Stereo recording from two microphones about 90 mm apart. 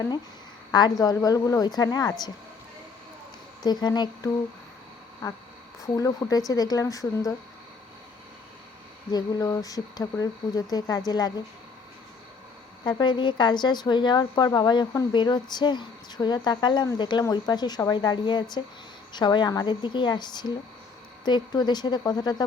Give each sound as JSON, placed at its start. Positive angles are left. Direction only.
{"t": 0.7, "sound": "speech", "side_deg": 50}
{"t": 3.6, "sound": "speech", "side_deg": 50}
{"t": 5.2, "sound": "speech", "side_deg": 40}
{"t": 9.1, "sound": "speech", "side_deg": 45}
{"t": 12.8, "sound": "a woman's voice", "side_deg": 55}